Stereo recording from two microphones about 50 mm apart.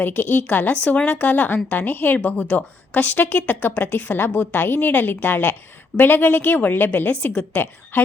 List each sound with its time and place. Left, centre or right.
0.0 s a woman's voice: left